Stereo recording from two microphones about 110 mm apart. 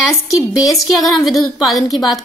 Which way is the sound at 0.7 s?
Centre (ahead or behind).